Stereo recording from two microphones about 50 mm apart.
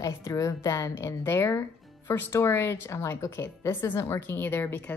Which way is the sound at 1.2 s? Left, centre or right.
Left.